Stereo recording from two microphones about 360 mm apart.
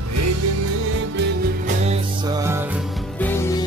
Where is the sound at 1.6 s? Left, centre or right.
Centre.